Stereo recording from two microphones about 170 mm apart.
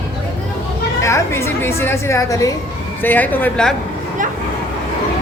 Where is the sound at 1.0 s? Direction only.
15° left (ahead or behind).